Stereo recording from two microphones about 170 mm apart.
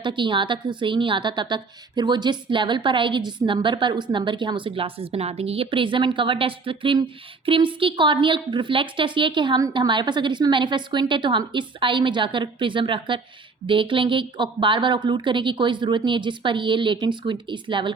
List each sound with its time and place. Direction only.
0.0 s a woman's voice: 30° right (ahead or behind)